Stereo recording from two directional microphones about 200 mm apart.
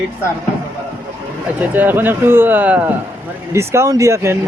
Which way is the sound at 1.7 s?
10° right (ahead or behind).